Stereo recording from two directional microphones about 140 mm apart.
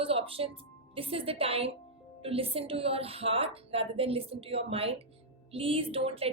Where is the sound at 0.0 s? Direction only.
40° right (ahead or behind).